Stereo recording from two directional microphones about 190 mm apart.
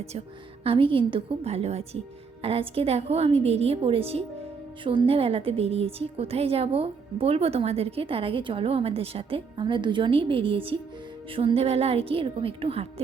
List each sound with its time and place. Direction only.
0.6 s a woman's voice: 30° right (ahead or behind)